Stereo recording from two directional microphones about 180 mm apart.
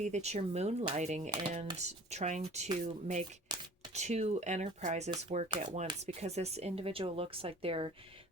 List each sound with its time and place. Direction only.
0.0 s speech: 40° right (ahead or behind)
3.5 s a sound: 25° right (ahead or behind)
3.9 s speech: 40° right (ahead or behind)